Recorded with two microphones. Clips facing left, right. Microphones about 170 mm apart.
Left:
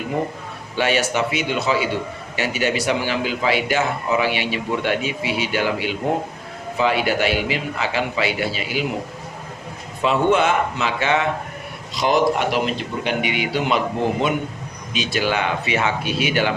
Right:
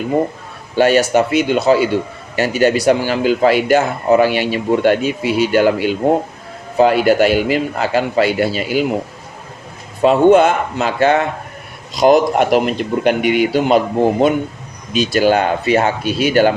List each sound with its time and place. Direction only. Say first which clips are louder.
0.8 s a man's voice: right 8 dB; 40° right (ahead or behind)
10.0 s a man's voice: right 8 dB; 45° right (ahead or behind)